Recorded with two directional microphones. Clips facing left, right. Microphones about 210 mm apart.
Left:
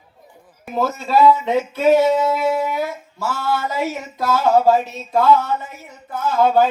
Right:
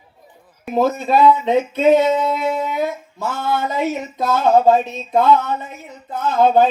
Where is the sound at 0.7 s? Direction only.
20° right (ahead or behind).